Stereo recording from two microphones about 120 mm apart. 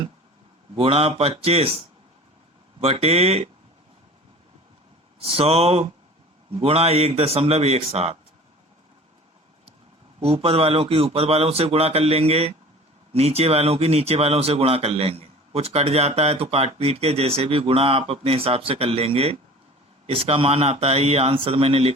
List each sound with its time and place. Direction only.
0.8 s speech: 55° right (ahead or behind)
2.8 s speech: 55° right (ahead or behind)
5.2 s speech: 55° right (ahead or behind)
10.2 s speech: 55° right (ahead or behind)